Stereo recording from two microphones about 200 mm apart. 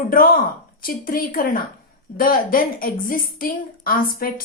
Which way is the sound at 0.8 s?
45° left (ahead or behind).